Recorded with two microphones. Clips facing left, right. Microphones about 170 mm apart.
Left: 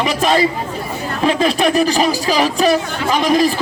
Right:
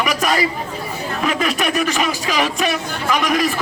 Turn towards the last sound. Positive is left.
turn(degrees=30)  # may be behind; listen again after turning